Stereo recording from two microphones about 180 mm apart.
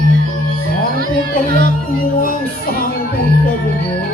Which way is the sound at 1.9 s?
50° left (ahead or behind).